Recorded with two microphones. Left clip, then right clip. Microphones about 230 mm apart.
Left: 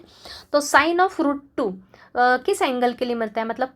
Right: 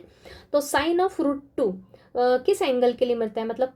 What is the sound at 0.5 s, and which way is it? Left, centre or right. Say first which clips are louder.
Speech: left 5 dB; centre.